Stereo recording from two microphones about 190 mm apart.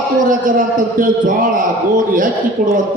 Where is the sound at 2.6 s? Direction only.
50° right (ahead or behind).